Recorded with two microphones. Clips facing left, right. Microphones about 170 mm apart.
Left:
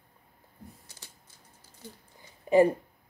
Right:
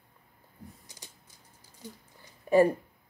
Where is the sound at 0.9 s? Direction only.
15° right (ahead or behind).